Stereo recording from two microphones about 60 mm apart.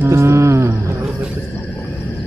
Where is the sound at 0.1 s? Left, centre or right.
Right.